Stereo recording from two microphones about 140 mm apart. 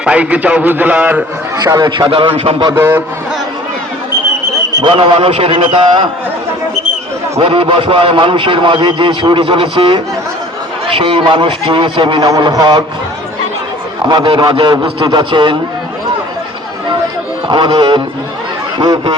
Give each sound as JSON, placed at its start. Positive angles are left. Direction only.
{"t": 0.0, "sound": "a man's voice", "side_deg": -10}
{"t": 1.6, "sound": "a man's voice", "side_deg": -30}
{"t": 2.7, "sound": "a man's voice", "side_deg": -15}
{"t": 4.7, "sound": "a man's voice", "side_deg": -35}
{"t": 7.3, "sound": "a man's voice", "side_deg": -40}
{"t": 14.1, "sound": "a man's voice", "side_deg": -35}
{"t": 17.5, "sound": "a man's voice", "side_deg": -35}